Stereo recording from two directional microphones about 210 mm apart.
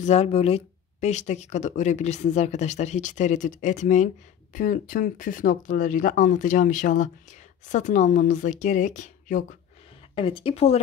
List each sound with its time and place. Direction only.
0.0 s speech: 30° left (ahead or behind)
10.1 s speech: 25° left (ahead or behind)